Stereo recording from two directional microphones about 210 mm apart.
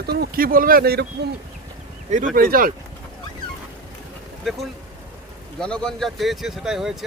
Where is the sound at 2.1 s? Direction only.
40° right (ahead or behind).